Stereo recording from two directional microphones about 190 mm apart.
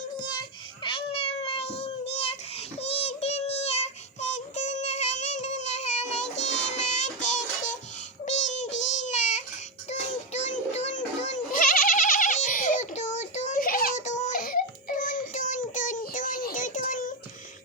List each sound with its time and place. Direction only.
0.8 s cat: 25° left (ahead or behind)
4.2 s child singing: 40° left (ahead or behind)
8.2 s a sound: 40° left (ahead or behind)
8.8 s baby cry: 40° left (ahead or behind)
9.9 s music: 35° left (ahead or behind)